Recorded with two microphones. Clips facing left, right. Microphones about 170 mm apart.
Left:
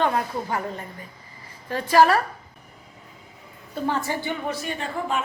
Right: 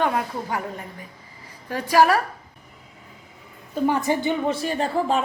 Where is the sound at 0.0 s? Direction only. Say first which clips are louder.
Even; 10° right (ahead or behind).